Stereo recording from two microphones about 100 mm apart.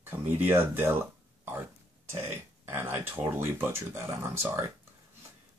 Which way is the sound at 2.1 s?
25° right (ahead or behind).